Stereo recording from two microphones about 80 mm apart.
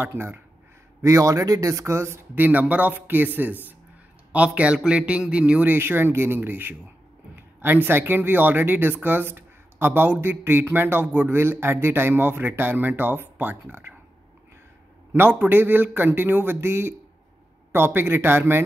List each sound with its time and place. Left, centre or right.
0.0 s speech: right
1.0 s speech: right
15.1 s speech: right